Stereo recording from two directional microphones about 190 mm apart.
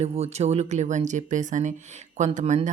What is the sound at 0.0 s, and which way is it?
Speech, 35° right (ahead or behind).